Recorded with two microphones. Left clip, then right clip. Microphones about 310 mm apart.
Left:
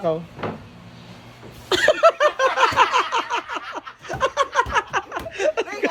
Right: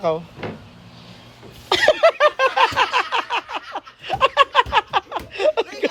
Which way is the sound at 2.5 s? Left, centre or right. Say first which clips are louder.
Even; centre.